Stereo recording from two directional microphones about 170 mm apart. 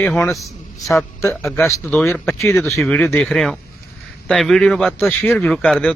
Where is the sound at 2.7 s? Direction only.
5° left (ahead or behind).